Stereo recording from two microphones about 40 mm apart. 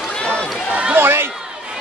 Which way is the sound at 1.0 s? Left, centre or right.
Right.